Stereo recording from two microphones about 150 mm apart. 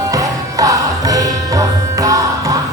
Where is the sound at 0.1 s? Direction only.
25° right (ahead or behind).